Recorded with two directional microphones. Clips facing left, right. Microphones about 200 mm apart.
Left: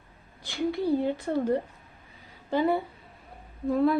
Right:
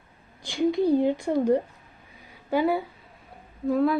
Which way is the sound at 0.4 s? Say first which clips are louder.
Right 5 dB; 15° right (ahead or behind).